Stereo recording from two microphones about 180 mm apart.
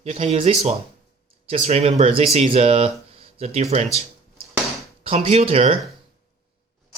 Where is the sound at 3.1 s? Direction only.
35° right (ahead or behind).